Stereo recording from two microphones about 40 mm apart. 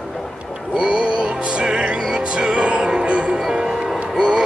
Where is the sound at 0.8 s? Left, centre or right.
Right.